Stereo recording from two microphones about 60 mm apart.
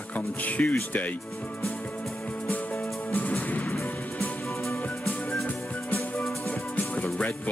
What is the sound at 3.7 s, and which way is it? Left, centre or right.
Music, left.